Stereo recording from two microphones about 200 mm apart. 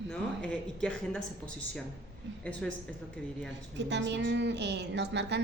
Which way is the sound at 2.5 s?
5° left (ahead or behind).